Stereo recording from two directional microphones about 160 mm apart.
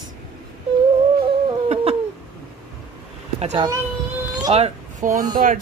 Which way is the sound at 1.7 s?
40° right (ahead or behind).